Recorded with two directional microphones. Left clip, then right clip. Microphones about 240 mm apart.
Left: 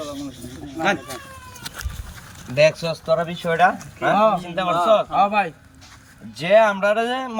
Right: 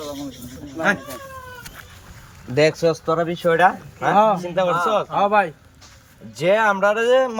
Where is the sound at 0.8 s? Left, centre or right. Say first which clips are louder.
Right 1 dB; centre.